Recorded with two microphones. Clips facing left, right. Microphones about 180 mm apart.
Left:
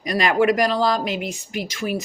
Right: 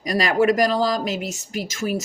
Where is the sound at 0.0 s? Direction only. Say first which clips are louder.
Even; 40° right (ahead or behind).